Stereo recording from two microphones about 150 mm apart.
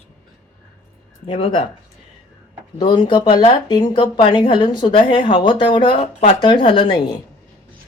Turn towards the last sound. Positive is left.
turn(degrees=35)  # may be behind; listen again after turning